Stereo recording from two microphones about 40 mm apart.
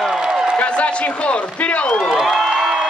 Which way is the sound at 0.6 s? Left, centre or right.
Left.